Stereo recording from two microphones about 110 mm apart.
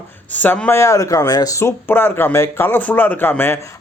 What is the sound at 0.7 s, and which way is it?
Speech, 25° left (ahead or behind).